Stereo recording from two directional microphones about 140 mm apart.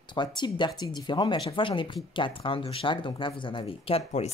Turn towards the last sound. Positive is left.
turn(degrees=45)  # may be behind; listen again after turning